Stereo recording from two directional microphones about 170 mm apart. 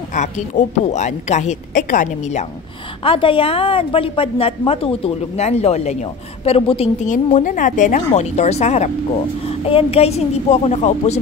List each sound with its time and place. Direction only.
0.1 s a woman's voice: 45° left (ahead or behind)
3.0 s a woman's voice: 30° left (ahead or behind)